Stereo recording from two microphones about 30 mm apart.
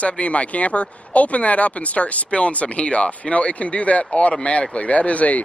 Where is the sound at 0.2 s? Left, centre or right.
Left.